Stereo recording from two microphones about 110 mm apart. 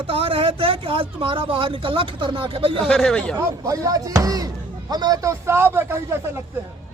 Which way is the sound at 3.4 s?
30° right (ahead or behind).